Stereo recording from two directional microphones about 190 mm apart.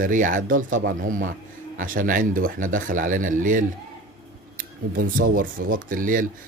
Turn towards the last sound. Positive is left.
turn(degrees=-45)  # may be behind; listen again after turning